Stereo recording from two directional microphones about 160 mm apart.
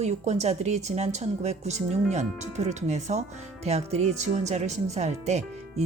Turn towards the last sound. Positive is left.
turn(degrees=-45)  # may be behind; listen again after turning